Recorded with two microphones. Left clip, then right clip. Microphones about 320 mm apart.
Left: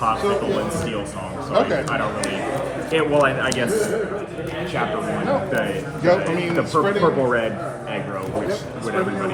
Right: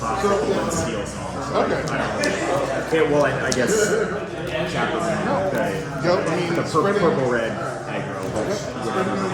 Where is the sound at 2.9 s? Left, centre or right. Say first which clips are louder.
Left 1 dB; left.